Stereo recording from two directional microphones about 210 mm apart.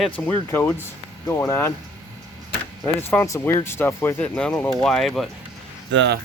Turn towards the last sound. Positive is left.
turn(degrees=-55)  # may be behind; listen again after turning